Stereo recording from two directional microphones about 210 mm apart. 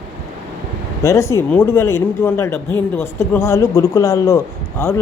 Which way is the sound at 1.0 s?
15° left (ahead or behind).